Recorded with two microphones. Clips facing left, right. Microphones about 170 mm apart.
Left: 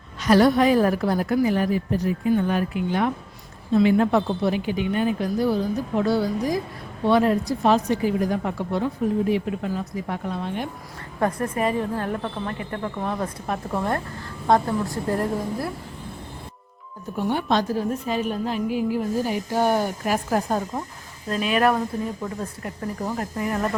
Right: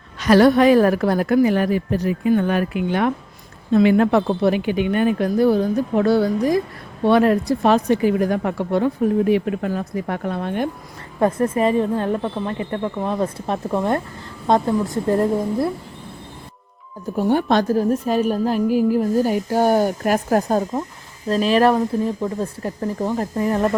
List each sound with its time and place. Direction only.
0.2 s a woman's voice: 75° right (ahead or behind); by 10.7 s 55° right (ahead or behind)
11.2 s a woman's voice: 25° right (ahead or behind)
17.2 s speech: 40° right (ahead or behind)
17.5 s a woman's voice: 50° right (ahead or behind)
21.2 s a woman's voice: 35° right (ahead or behind)